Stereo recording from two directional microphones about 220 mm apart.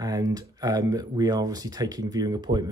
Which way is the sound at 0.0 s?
15° right (ahead or behind).